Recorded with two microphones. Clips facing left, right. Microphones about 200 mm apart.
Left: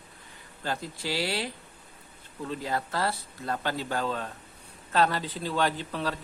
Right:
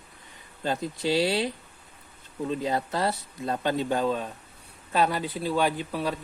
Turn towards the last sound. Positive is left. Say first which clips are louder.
# right 2 dB
turn(degrees=-10)  # may be behind; listen again after turning